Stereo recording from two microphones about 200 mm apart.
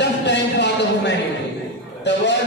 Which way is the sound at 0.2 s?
60° left (ahead or behind).